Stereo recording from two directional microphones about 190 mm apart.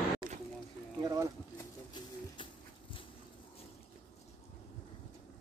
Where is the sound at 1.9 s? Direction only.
25° left (ahead or behind).